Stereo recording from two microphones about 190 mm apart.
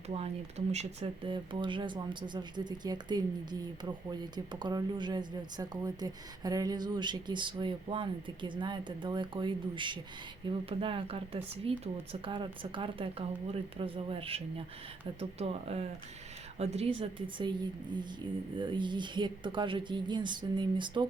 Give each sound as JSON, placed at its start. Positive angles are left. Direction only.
{"t": 0.1, "sound": "speech", "side_deg": -35}